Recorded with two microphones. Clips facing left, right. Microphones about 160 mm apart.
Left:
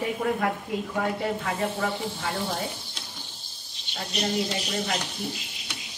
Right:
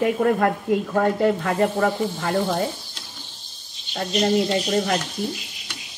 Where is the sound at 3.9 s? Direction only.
55° right (ahead or behind).